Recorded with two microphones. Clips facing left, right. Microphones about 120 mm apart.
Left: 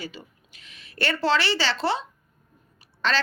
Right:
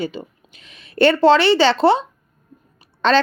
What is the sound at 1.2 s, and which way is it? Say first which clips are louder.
A woman's voice: right 9 dB; 20° right (ahead or behind).